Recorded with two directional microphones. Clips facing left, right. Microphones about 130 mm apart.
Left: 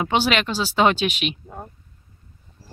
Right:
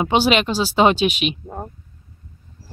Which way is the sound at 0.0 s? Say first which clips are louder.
Right 4 dB; 20° right (ahead or behind).